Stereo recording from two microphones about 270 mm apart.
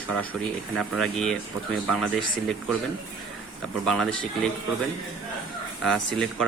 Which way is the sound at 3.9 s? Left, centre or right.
Centre.